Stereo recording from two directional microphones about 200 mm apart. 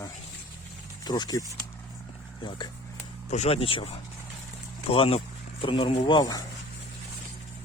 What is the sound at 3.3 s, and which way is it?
Speech, 30° left (ahead or behind).